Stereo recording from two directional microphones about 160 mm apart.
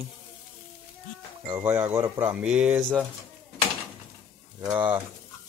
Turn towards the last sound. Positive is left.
turn(degrees=-10)  # may be behind; listen again after turning